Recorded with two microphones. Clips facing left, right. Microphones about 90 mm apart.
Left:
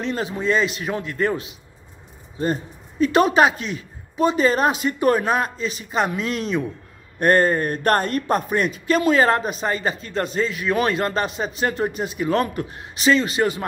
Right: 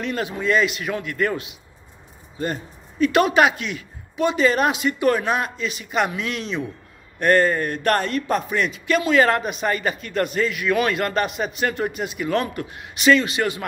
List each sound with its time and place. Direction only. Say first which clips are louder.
0.0 s a man's voice: left 1 dB; 30° left (ahead or behind)